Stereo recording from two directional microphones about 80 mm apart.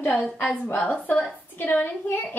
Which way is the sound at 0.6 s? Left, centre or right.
Centre.